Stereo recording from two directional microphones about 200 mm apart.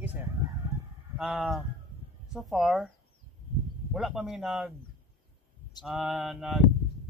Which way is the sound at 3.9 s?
Centre (ahead or behind).